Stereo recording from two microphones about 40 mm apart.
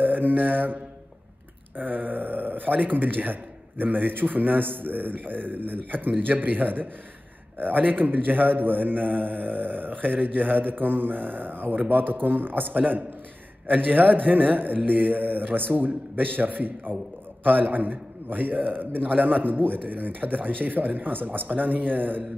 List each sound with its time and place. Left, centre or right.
0.0 s mantra: right
1.8 s a man's voice: right
12.7 s a man's voice: right